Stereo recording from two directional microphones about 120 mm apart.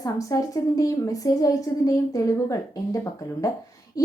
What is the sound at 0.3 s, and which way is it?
A woman's voice, 30° left (ahead or behind).